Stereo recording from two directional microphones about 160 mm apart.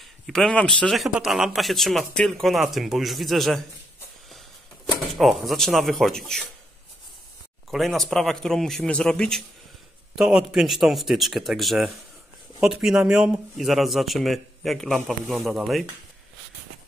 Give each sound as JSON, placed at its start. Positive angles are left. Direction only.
{"t": 0.3, "sound": "speech", "side_deg": 5}
{"t": 5.1, "sound": "speech", "side_deg": 0}
{"t": 7.7, "sound": "speech", "side_deg": 0}